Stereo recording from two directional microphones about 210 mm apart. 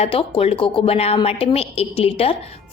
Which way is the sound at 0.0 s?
25° left (ahead or behind).